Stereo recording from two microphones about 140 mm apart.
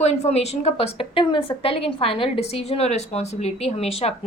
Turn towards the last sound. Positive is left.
turn(degrees=45)  # may be behind; listen again after turning